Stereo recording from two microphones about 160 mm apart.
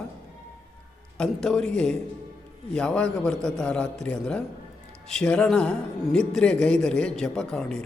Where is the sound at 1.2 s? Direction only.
5° left (ahead or behind).